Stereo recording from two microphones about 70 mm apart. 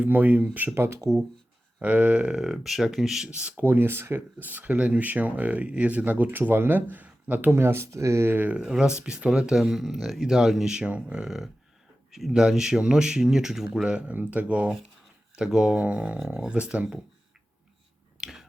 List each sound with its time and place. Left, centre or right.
0.0 s speech: right; by 3.2 s centre
3.3 s speech: right
7.5 s speech: right
8.3 s speech: right
9.6 s speech: centre
18.2 s a sound: centre